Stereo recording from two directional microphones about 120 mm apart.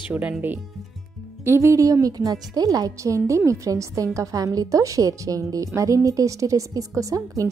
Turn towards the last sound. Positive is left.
turn(degrees=-30)  # may be behind; listen again after turning